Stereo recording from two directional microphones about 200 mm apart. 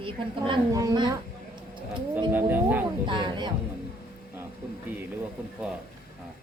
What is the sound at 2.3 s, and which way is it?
Speech, 10° right (ahead or behind).